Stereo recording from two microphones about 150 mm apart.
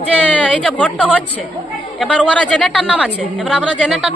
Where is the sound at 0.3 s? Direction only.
10° left (ahead or behind).